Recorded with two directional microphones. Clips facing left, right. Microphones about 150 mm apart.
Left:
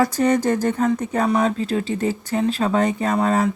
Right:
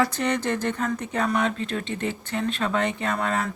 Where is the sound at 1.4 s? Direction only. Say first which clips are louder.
Left 6 dB; 30° left (ahead or behind).